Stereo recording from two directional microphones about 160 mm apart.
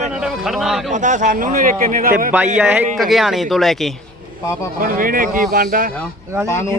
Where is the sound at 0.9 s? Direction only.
50° right (ahead or behind).